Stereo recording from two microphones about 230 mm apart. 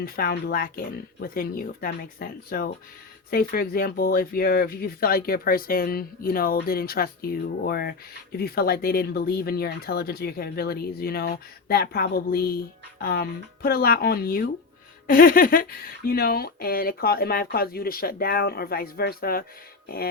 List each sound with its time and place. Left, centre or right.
0.0 s speech: left